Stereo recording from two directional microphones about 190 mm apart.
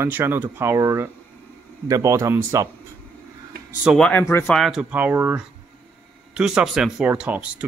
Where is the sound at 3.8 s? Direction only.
5° left (ahead or behind).